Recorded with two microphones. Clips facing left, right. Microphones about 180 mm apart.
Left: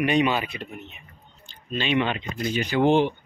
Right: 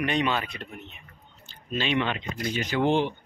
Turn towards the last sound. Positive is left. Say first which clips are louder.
# left 4 dB
turn(degrees=15)  # may be behind; listen again after turning